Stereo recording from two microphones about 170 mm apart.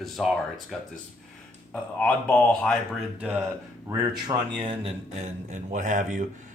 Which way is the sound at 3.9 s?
20° right (ahead or behind).